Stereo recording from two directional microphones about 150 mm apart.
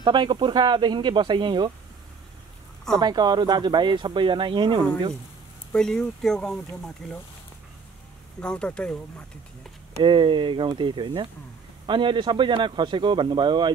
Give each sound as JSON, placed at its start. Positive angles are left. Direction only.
{"t": 0.0, "sound": "speech", "side_deg": -30}
{"t": 2.9, "sound": "speech", "side_deg": -30}
{"t": 5.7, "sound": "speech", "side_deg": 5}
{"t": 8.4, "sound": "speech", "side_deg": 5}
{"t": 10.0, "sound": "speech", "side_deg": -35}